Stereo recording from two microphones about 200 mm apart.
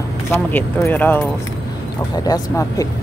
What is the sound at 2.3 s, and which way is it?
Speech, 15° left (ahead or behind).